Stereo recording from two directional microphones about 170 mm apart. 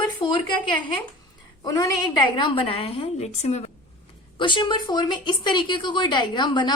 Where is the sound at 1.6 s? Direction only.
20° left (ahead or behind); by 3.7 s 40° left (ahead or behind).